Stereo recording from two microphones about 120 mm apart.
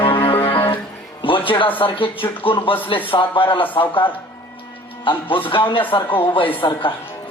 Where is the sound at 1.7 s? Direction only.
45° left (ahead or behind).